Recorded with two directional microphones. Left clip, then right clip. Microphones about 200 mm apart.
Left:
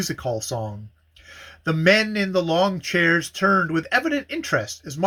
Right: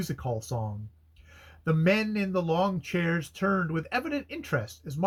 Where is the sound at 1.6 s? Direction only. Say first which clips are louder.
Left 8 dB; 15° left (ahead or behind).